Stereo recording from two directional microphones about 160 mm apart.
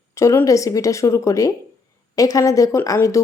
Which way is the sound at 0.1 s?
20° left (ahead or behind).